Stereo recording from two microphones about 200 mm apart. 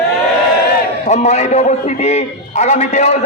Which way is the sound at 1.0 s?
35° left (ahead or behind).